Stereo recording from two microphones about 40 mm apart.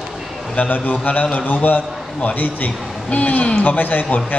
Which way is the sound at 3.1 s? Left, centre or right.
Left.